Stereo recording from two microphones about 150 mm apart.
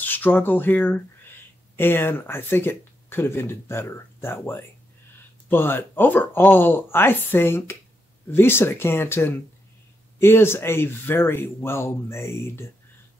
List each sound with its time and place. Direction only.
0.0 s speech: 10° left (ahead or behind)